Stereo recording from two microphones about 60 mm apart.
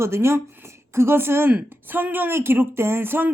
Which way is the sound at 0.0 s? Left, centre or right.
Right.